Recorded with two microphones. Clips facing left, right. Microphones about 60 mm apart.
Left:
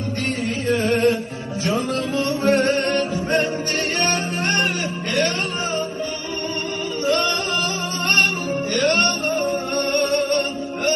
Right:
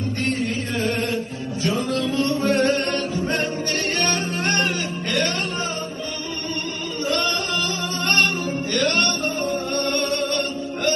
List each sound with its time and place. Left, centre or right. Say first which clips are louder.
0.4 s a sound: left 4 dB; left
1.6 s music: even; left
7.0 s singing: left 3 dB; left
8.0 s music: left 1 dB; left